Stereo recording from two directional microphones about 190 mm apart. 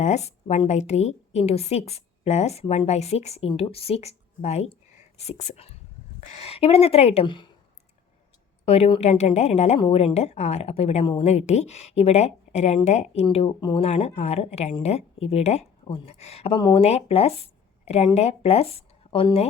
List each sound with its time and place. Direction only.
0.0 s a woman's voice: 35° left (ahead or behind)
8.6 s a woman's voice: 30° left (ahead or behind)
13.2 s a woman's voice: 25° left (ahead or behind)